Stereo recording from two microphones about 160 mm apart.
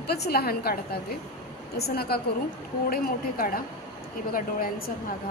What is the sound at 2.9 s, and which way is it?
A woman's voice, 65° left (ahead or behind).